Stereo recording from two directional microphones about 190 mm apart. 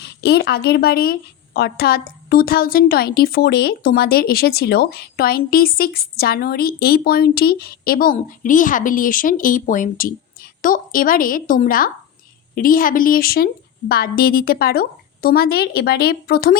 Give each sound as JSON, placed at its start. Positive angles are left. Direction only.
{"t": 0.0, "sound": "a woman's voice", "side_deg": 60}